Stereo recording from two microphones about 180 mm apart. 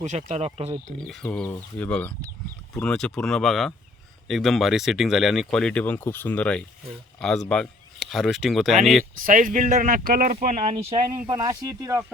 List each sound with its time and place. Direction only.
0.0 s speech: 40° right (ahead or behind)
1.0 s speech: 5° left (ahead or behind)
9.2 s speech: 50° right (ahead or behind)
10.6 s speech: 30° right (ahead or behind)